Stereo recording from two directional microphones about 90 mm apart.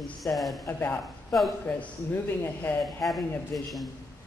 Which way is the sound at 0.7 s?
20° left (ahead or behind).